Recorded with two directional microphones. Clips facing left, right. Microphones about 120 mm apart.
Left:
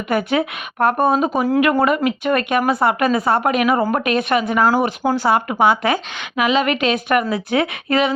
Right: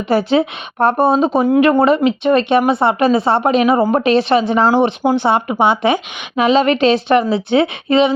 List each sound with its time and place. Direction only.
0.1 s speech: 30° right (ahead or behind)